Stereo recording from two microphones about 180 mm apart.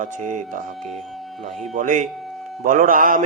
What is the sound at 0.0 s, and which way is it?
Mantra, 45° right (ahead or behind).